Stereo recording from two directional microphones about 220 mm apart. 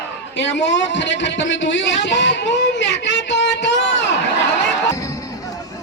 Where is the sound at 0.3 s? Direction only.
55° left (ahead or behind).